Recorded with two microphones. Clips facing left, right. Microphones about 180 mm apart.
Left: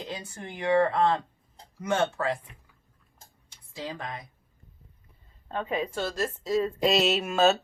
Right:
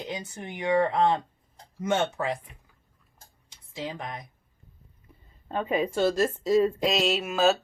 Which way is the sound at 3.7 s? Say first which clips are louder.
Right 1 dB; 20° right (ahead or behind).